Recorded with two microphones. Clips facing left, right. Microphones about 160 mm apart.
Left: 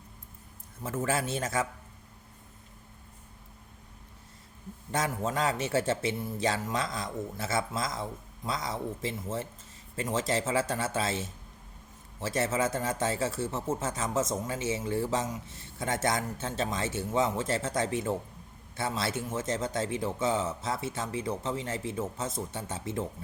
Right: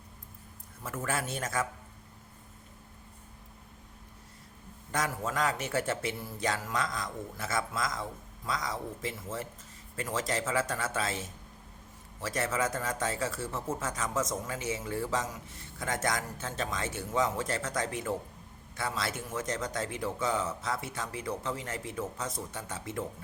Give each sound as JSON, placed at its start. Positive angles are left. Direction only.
{"t": 0.8, "sound": "speech", "side_deg": 25}
{"t": 4.9, "sound": "speech", "side_deg": 25}